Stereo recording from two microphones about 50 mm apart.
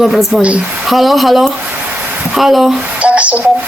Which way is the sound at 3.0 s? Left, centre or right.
Right.